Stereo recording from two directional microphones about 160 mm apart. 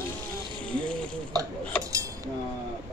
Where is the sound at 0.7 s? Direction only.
5° left (ahead or behind).